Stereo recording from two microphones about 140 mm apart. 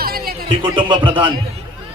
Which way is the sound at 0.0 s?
90° right.